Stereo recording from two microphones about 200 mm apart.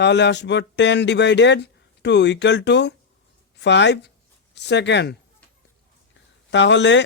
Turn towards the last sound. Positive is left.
turn(degrees=60)  # may be behind; listen again after turning